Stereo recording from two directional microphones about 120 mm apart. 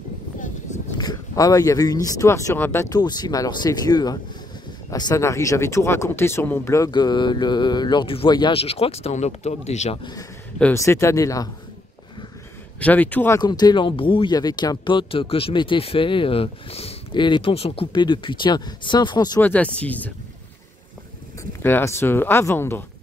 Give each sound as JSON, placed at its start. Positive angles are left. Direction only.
{"t": 0.4, "sound": "a sound", "side_deg": 90}
{"t": 0.9, "sound": "speech", "side_deg": 30}
{"t": 2.9, "sound": "speech", "side_deg": 35}
{"t": 6.9, "sound": "speech", "side_deg": 40}
{"t": 10.7, "sound": "speech", "side_deg": 25}
{"t": 12.8, "sound": "speech", "side_deg": 15}
{"t": 13.4, "sound": "speech", "side_deg": 35}
{"t": 17.1, "sound": "speech", "side_deg": 40}
{"t": 19.4, "sound": "speech", "side_deg": 10}
{"t": 21.6, "sound": "speech", "side_deg": 20}